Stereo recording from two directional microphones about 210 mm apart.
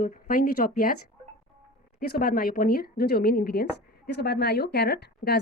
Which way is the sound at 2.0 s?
45° left (ahead or behind).